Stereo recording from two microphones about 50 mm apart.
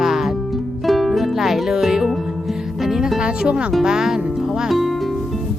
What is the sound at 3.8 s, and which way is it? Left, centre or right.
Speech, centre.